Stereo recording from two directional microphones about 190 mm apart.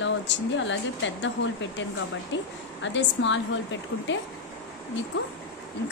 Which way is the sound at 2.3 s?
75° left (ahead or behind).